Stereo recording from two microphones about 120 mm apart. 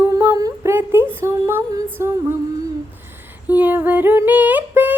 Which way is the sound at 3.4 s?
15° right (ahead or behind).